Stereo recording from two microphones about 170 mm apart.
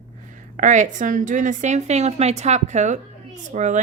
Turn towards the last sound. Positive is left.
turn(degrees=-45)  # may be behind; listen again after turning